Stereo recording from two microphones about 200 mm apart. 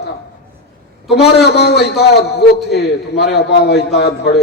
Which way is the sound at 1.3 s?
55° left (ahead or behind).